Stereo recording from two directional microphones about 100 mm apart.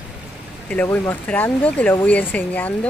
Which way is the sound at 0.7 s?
15° left (ahead or behind).